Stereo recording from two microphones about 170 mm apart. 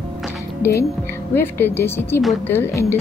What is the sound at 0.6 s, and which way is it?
A woman's voice, 15° left (ahead or behind).